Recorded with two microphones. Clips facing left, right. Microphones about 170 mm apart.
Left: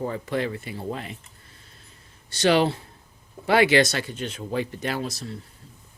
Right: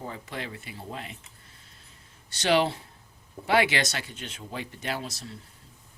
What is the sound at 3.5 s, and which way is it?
Speech, 45° left (ahead or behind).